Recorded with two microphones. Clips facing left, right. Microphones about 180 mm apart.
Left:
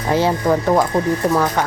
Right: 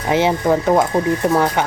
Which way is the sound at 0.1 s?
20° right (ahead or behind).